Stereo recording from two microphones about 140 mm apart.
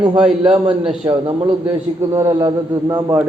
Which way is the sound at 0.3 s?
50° right (ahead or behind).